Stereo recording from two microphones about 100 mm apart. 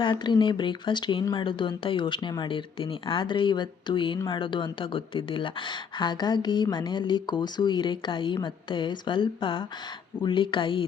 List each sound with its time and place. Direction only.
0.0 s speech: 55° left (ahead or behind)